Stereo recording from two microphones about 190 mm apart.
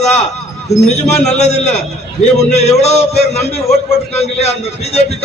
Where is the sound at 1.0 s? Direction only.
35° left (ahead or behind).